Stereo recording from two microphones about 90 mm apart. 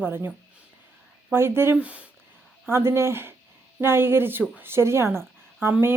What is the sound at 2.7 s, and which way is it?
Speech, 30° right (ahead or behind).